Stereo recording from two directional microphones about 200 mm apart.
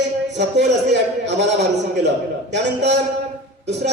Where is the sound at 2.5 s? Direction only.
60° right (ahead or behind).